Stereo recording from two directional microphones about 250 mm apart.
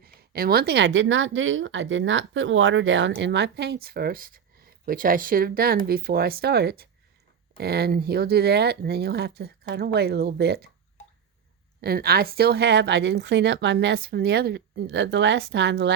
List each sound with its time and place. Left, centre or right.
0.0 s speech: right
11.8 s speech: right